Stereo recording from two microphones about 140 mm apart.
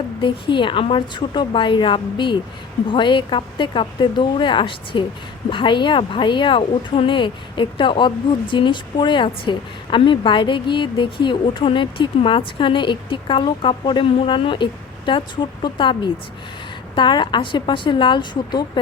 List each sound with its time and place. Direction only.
0.2 s a woman's voice: 35° left (ahead or behind)